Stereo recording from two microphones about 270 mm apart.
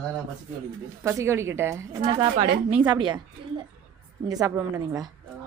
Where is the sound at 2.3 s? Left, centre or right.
Right.